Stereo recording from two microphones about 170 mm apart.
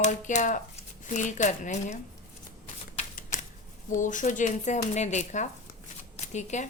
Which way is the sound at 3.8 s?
50° left (ahead or behind).